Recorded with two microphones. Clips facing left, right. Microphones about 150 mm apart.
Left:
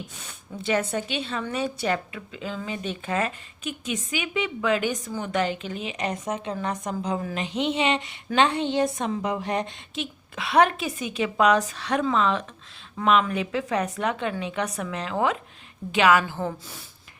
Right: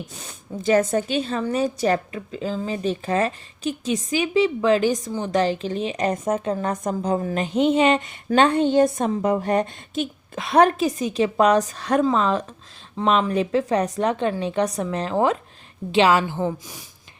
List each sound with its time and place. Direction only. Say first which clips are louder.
0.1 s a woman's voice: right 5 dB; 40° right (ahead or behind); by 16.8 s 15° right (ahead or behind)